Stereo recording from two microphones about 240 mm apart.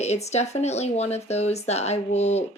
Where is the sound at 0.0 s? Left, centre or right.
Left.